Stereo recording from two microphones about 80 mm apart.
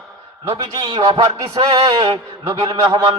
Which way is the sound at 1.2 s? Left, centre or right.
Right.